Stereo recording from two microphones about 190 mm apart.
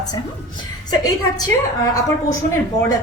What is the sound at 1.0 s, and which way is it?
Speech, 20° left (ahead or behind).